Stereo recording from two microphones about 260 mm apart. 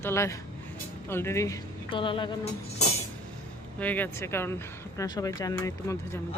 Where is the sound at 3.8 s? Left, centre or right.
Centre.